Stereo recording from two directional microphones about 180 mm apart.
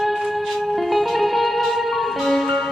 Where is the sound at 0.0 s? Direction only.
Centre (ahead or behind).